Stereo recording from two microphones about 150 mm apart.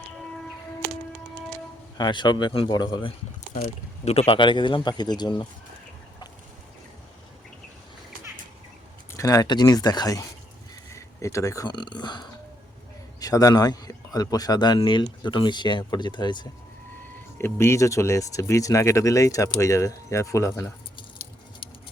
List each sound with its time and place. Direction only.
2.0 s speech: 30° left (ahead or behind)
4.0 s speech: 45° left (ahead or behind); by 5.5 s 30° left (ahead or behind)
9.1 s speech: 20° left (ahead or behind)
17.3 s speech: 15° left (ahead or behind)